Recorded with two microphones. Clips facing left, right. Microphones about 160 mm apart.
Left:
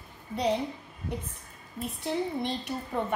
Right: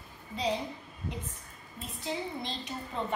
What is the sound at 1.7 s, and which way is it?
A woman's voice, 60° left (ahead or behind).